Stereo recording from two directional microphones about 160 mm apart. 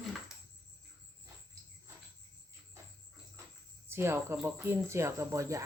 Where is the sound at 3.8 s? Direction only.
15° right (ahead or behind).